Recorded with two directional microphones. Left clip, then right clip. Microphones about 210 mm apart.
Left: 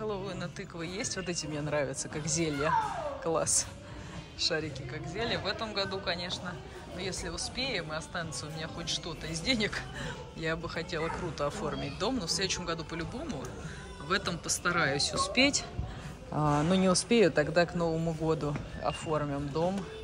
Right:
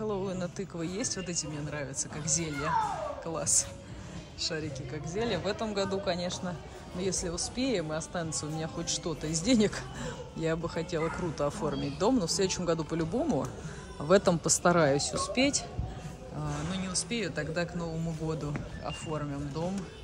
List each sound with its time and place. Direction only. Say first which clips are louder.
0.0 s speech: right 2 dB; 15° right (ahead or behind)
16.3 s speech: left 10 dB; 5° left (ahead or behind)